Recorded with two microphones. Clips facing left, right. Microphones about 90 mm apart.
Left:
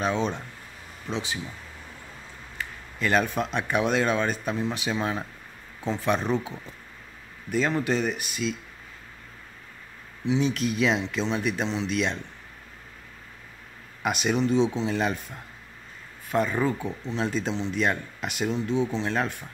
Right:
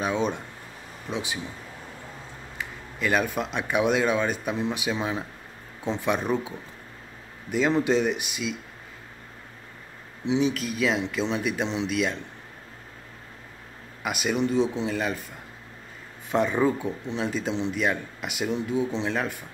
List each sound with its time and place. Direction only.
0.0 s speech: 15° right (ahead or behind)
2.5 s a sound: 10° right (ahead or behind)
3.5 s speech: 10° right (ahead or behind)
7.7 s speech: 15° right (ahead or behind)
10.2 s speech: 20° right (ahead or behind)
10.5 s speech: 5° right (ahead or behind)
14.0 s speech: 5° right (ahead or behind)
16.3 s speech: 20° right (ahead or behind)